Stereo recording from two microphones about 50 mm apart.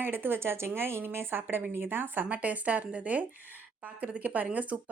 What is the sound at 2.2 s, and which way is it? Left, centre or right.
Speech, right.